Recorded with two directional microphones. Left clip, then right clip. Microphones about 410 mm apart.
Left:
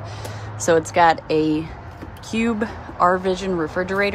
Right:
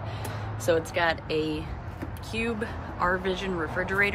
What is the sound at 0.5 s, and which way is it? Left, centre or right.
Speech, centre.